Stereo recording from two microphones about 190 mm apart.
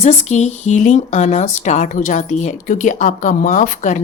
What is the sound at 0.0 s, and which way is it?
Speech, 35° left (ahead or behind).